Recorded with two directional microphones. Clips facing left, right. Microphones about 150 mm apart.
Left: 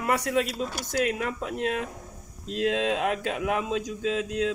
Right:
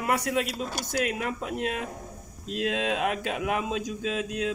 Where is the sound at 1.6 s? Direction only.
10° right (ahead or behind).